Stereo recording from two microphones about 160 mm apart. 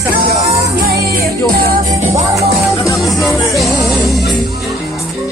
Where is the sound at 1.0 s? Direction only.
75° right (ahead or behind).